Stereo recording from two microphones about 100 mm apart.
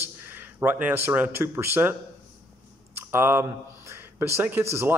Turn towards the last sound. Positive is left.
turn(degrees=-25)  # may be behind; listen again after turning